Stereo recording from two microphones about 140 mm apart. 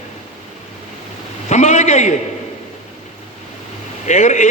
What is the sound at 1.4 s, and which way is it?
Speech, 55° left (ahead or behind).